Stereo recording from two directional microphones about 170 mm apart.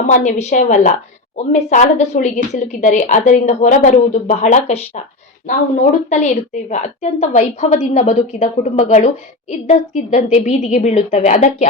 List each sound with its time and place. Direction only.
0.0 s a woman's voice: 45° left (ahead or behind)